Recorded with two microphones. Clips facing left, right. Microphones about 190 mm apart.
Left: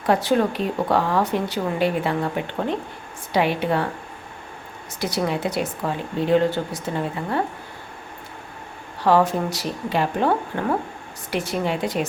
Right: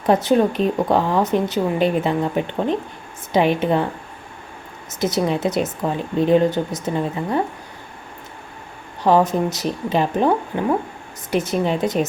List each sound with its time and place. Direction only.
0.0 s speech: 20° right (ahead or behind)
4.9 s speech: 20° right (ahead or behind)
9.0 s speech: 20° right (ahead or behind)